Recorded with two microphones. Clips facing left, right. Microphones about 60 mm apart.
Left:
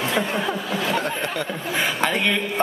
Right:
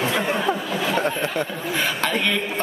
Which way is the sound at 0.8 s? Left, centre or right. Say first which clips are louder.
Right 3 dB; centre.